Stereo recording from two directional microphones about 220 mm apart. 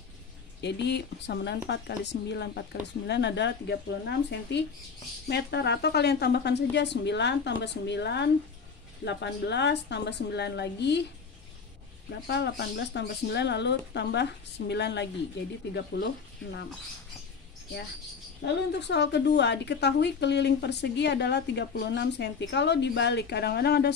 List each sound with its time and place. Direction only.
0.6 s a woman's voice: 50° left (ahead or behind)
12.3 s a woman's voice: 50° left (ahead or behind)
18.4 s a woman's voice: 50° left (ahead or behind)